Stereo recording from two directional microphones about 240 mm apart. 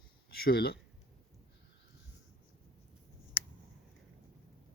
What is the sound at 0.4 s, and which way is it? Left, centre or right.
Speech, left.